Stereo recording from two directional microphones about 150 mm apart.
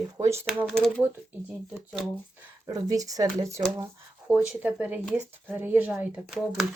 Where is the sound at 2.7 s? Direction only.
25° right (ahead or behind).